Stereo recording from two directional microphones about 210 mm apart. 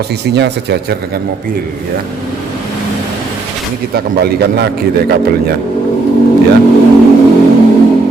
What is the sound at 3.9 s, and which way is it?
A man's voice, 50° right (ahead or behind).